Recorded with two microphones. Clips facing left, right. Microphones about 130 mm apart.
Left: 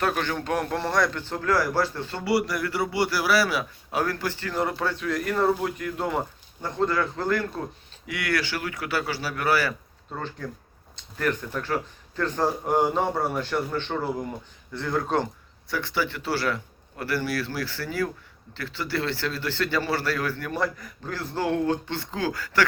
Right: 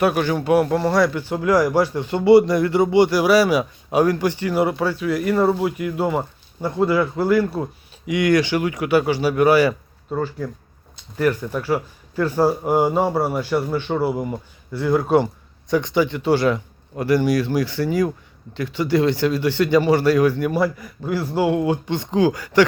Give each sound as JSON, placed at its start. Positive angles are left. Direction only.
{"t": 0.0, "sound": "a man's voice", "side_deg": -10}